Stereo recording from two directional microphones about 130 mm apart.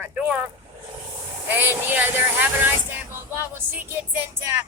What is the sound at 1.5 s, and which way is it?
A woman's voice, 15° right (ahead or behind).